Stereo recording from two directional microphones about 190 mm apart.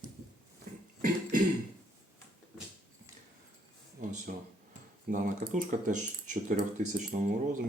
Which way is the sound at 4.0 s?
45° right (ahead or behind).